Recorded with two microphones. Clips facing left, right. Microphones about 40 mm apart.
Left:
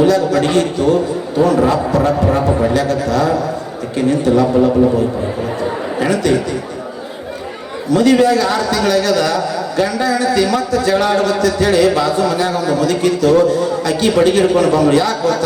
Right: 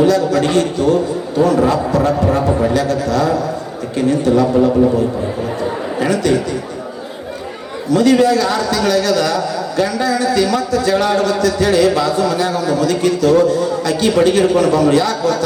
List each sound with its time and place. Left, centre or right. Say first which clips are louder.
0.0 s a man's voice: left 1 dB; left
5.6 s a sound: left 1 dB; left
7.9 s a man's voice: even; left